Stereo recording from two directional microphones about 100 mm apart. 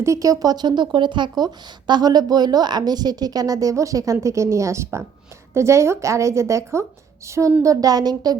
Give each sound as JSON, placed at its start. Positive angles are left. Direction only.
{"t": 0.0, "sound": "a woman's voice", "side_deg": -30}